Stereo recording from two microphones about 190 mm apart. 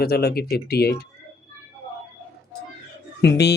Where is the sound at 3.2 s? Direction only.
60° left (ahead or behind).